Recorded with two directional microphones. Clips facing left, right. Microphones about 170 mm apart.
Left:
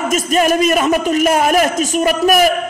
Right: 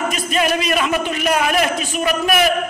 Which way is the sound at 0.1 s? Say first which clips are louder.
Left 5 dB; 45° left (ahead or behind).